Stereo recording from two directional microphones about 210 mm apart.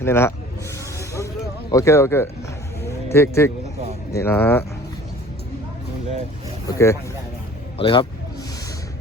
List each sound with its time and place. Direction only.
0.0 s speech: 10° left (ahead or behind)
0.9 s music: 15° left (ahead or behind)
1.7 s speech: 15° left (ahead or behind)
2.8 s vehicle: 15° left (ahead or behind)
4.1 s speech: 10° left (ahead or behind)
6.7 s speech: 15° left (ahead or behind)
7.8 s a man's voice: 25° left (ahead or behind)